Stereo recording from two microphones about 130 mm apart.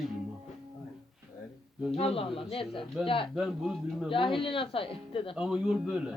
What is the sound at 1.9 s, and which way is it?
Speech, 50° left (ahead or behind).